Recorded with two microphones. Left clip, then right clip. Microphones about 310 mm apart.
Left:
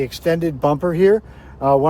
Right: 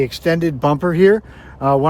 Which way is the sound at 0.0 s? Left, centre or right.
Right.